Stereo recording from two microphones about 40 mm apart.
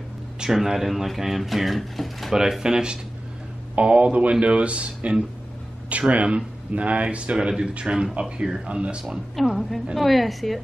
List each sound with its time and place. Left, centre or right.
0.5 s speech: centre
2.6 s speech: centre
3.7 s a man's voice: right
9.4 s speech: centre